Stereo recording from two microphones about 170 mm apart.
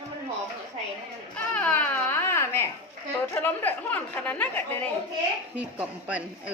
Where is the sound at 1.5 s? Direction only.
10° left (ahead or behind).